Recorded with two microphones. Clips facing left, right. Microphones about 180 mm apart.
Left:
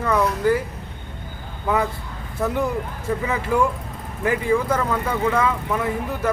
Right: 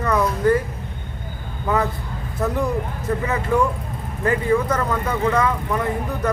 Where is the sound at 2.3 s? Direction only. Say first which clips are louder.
Right 1 dB; 5° left (ahead or behind).